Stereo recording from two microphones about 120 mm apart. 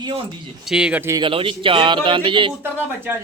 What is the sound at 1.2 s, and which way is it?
Speech, 50° right (ahead or behind).